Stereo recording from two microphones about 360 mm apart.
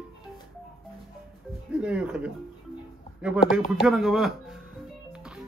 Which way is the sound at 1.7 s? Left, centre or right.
Centre.